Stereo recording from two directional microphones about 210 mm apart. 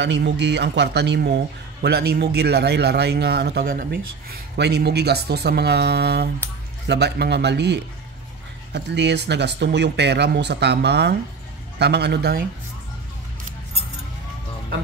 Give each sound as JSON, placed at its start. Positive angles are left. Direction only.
{"t": 0.0, "sound": "speech", "side_deg": -55}